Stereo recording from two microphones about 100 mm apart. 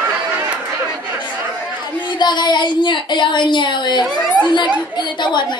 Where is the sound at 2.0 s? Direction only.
50° left (ahead or behind).